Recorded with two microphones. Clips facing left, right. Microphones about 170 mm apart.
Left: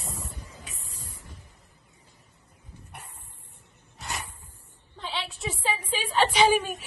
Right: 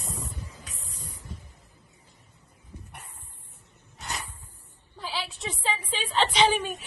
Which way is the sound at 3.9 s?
Centre (ahead or behind).